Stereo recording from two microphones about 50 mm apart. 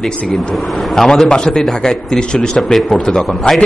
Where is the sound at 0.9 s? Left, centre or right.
Centre.